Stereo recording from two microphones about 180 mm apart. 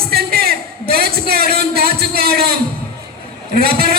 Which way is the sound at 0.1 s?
60° right (ahead or behind).